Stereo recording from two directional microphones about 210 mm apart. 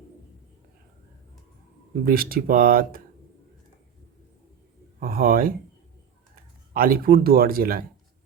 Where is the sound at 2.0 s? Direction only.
45° right (ahead or behind).